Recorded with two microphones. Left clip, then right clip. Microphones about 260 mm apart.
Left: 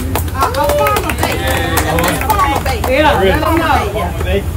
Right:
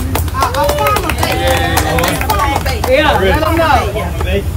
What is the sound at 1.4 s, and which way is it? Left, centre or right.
Run, right.